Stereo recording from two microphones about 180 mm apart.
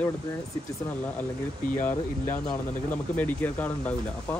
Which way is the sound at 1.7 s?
10° left (ahead or behind).